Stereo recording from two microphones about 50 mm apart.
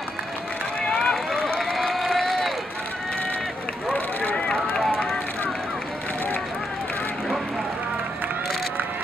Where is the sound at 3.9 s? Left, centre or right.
Left.